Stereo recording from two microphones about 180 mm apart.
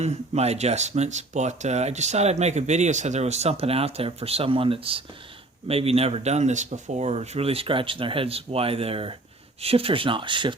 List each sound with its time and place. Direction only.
0.0 s speech: 35° right (ahead or behind)